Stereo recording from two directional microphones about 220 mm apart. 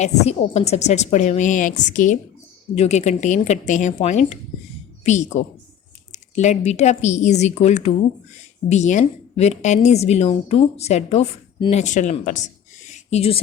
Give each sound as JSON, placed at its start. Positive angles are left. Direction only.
{"t": 0.0, "sound": "a woman's voice", "side_deg": 30}